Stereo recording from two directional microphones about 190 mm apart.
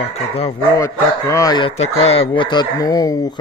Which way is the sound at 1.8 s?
30° left (ahead or behind).